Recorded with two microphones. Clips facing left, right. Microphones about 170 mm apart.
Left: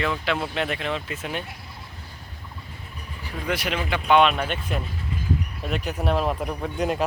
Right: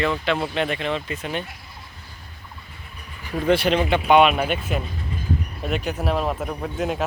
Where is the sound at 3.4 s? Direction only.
30° right (ahead or behind).